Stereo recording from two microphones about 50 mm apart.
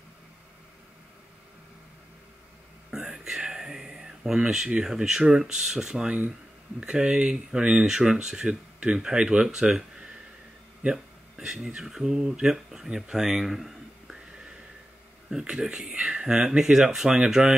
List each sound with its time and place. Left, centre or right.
2.9 s whispering: centre
4.6 s speech: centre
6.0 s speech: right
10.8 s a sound: centre
11.4 s speech: centre
15.2 s speech: centre
17.4 s speech: centre